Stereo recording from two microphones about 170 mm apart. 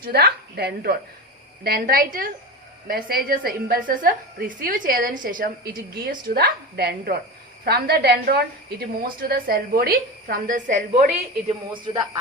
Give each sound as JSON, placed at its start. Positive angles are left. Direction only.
{"t": 0.0, "sound": "a woman's voice", "side_deg": -65}
{"t": 5.9, "sound": "a woman's voice", "side_deg": -65}
{"t": 11.4, "sound": "a woman's voice", "side_deg": -30}